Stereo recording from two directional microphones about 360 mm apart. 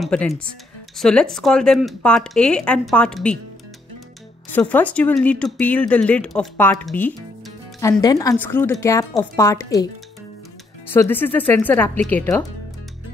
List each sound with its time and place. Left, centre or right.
0.0 s speech: centre
4.5 s speech: centre
10.9 s speech: centre